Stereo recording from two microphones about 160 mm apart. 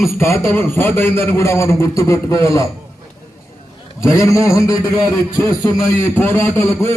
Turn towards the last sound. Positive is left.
turn(degrees=15)  # may be behind; listen again after turning